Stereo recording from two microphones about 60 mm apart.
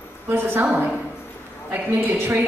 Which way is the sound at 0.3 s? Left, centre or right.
Right.